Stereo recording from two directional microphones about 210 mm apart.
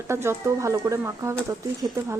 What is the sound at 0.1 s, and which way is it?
Speech, 10° right (ahead or behind).